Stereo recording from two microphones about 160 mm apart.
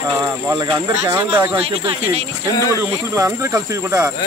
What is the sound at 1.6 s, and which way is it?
Speech, 40° right (ahead or behind).